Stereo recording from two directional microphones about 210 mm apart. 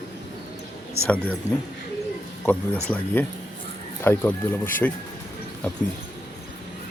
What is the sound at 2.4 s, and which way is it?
Speech, 10° left (ahead or behind).